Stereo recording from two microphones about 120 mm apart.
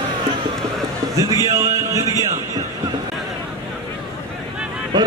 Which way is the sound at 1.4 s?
25° right (ahead or behind).